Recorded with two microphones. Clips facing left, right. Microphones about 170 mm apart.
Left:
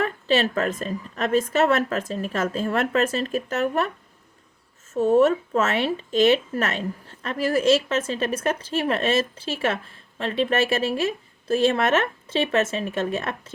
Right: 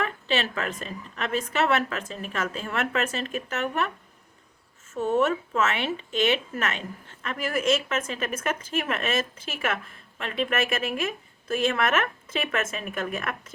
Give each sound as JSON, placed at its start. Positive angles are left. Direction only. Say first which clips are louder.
{"t": 0.0, "sound": "speech", "louder": "left 5 dB", "side_deg": 40}
{"t": 4.9, "sound": "speech", "louder": "left 6 dB", "side_deg": 35}